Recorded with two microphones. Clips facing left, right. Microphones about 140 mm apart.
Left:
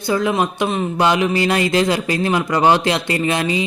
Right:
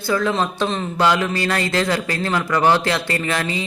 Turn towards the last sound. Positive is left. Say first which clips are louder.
# left 4 dB
turn(degrees=20)  # may be behind; listen again after turning